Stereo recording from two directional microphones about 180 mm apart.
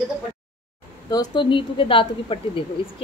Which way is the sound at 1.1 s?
25° left (ahead or behind).